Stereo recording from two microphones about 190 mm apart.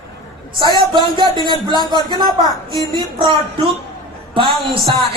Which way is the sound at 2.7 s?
25° right (ahead or behind).